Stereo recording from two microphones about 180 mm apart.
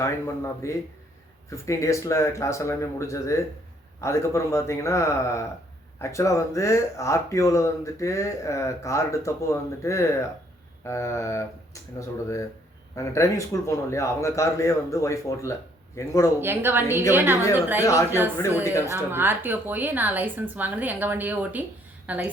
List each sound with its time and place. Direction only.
0.0 s speech: 15° left (ahead or behind)
16.4 s a woman's voice: 10° right (ahead or behind)
18.4 s speech: 15° left (ahead or behind)
18.9 s a woman's voice: 10° right (ahead or behind)